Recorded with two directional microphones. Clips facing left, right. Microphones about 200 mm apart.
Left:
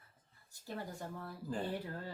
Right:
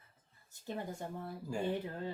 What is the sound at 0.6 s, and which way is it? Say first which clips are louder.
Speech: right 3 dB; 20° right (ahead or behind).